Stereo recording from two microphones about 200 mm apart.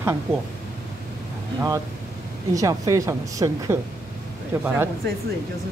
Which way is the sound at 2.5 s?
15° right (ahead or behind).